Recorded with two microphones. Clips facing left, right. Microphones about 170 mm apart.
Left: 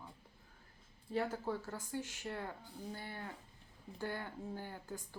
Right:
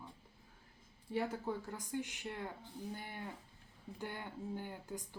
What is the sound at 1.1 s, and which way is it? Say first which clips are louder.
Speech: left 1 dB; 15° right (ahead or behind).